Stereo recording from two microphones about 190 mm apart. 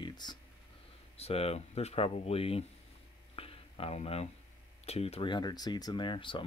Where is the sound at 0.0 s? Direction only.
20° left (ahead or behind).